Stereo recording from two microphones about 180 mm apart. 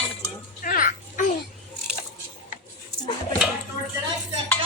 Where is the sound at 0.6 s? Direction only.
50° left (ahead or behind).